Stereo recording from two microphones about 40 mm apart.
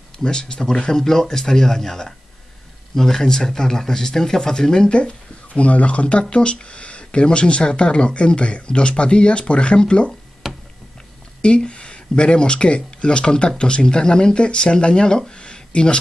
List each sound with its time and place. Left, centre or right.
0.2 s a man's voice: left
10.4 s a sound: centre
11.4 s speech: left